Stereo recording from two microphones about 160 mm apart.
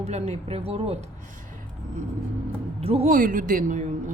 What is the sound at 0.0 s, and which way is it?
Speech, 40° right (ahead or behind).